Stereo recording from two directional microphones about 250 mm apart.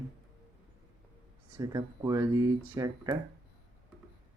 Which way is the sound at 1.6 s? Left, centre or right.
Centre.